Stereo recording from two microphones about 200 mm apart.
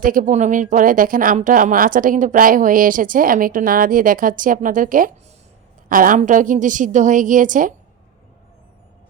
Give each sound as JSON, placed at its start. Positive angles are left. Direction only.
{"t": 0.0, "sound": "a woman's voice", "side_deg": -45}